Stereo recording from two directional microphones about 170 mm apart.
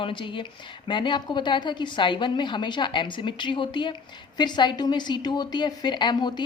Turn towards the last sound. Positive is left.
turn(degrees=25)  # may be behind; listen again after turning